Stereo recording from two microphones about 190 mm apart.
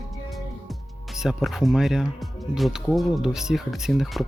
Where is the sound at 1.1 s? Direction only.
Centre (ahead or behind).